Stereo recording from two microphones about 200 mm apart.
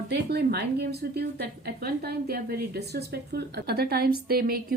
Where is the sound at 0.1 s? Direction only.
55° right (ahead or behind).